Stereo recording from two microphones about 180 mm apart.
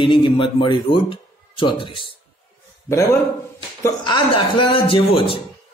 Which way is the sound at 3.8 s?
25° left (ahead or behind).